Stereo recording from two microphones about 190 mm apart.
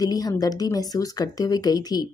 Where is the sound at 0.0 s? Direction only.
20° left (ahead or behind).